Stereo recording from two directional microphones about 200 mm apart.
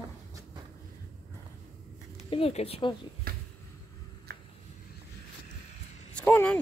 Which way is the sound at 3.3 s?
50° right (ahead or behind).